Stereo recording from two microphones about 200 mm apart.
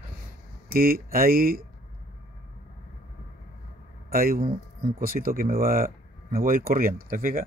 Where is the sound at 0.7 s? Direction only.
45° right (ahead or behind).